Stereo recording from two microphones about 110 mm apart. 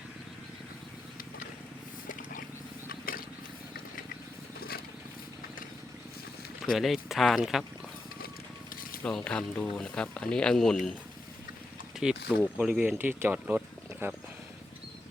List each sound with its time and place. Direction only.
6.7 s speech: centre (ahead or behind)
9.0 s speech: 5° left (ahead or behind)
11.9 s speech: 10° right (ahead or behind)